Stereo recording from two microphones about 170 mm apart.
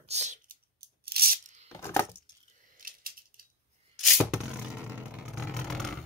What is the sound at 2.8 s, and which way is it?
Scissors, 55° right (ahead or behind).